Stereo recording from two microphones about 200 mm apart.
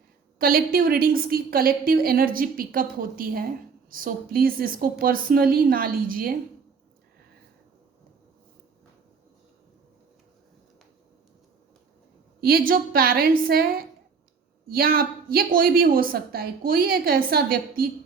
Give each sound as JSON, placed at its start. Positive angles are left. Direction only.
{"t": 0.3, "sound": "a woman's voice", "side_deg": -45}
{"t": 12.4, "sound": "a woman's voice", "side_deg": -50}